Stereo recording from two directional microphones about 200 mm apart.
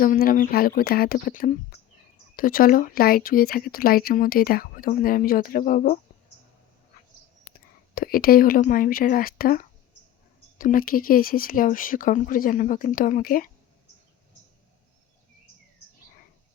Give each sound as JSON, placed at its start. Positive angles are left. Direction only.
{"t": 0.0, "sound": "speech", "side_deg": 45}
{"t": 7.9, "sound": "speech", "side_deg": 45}